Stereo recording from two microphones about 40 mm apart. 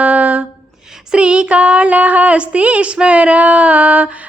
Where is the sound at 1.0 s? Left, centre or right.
Right.